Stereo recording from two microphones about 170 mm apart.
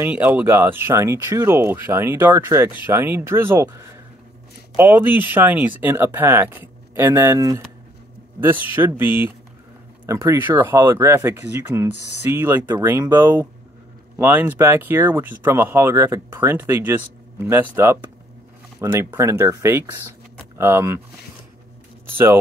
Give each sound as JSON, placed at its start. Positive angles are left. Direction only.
{"t": 0.0, "sound": "speech", "side_deg": -10}
{"t": 8.8, "sound": "speech", "side_deg": -10}
{"t": 22.1, "sound": "speech", "side_deg": -15}